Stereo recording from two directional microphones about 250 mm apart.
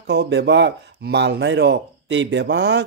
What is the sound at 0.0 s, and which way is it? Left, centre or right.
Speech, right.